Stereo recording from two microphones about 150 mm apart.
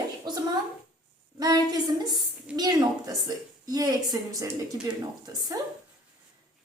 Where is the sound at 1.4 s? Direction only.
25° right (ahead or behind).